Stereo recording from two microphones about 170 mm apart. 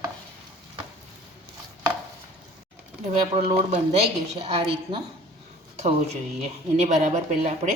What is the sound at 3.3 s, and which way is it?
A woman's voice, 40° right (ahead or behind).